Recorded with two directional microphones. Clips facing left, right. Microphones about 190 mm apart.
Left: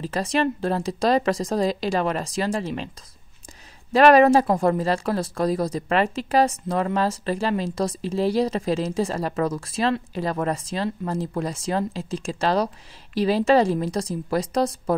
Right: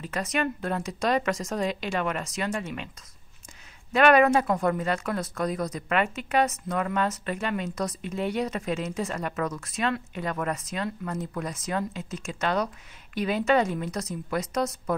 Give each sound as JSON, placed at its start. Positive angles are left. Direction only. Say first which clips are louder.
{"t": 0.0, "sound": "speech", "louder": "left 5 dB", "side_deg": 30}
{"t": 3.9, "sound": "speech", "louder": "left 5 dB", "side_deg": 35}